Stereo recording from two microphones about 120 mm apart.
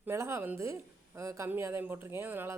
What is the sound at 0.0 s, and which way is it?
Speech, 20° right (ahead or behind).